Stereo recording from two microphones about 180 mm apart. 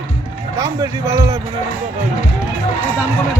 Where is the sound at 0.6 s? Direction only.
15° right (ahead or behind).